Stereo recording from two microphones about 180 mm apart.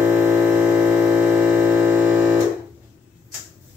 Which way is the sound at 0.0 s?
15° right (ahead or behind).